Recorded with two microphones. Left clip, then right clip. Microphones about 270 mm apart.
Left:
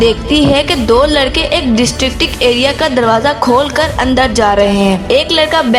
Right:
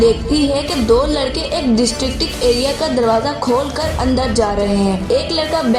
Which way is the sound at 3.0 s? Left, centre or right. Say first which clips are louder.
Left 5 dB; left.